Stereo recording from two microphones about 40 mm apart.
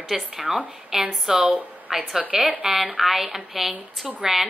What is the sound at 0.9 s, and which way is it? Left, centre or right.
A woman's voice, centre.